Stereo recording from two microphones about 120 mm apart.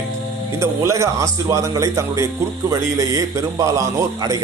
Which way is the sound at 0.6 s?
25° right (ahead or behind).